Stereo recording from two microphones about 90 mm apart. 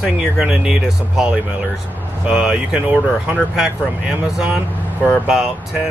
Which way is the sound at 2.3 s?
10° right (ahead or behind).